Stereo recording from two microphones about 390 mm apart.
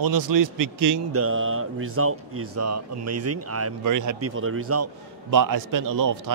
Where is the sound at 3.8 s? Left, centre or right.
Right.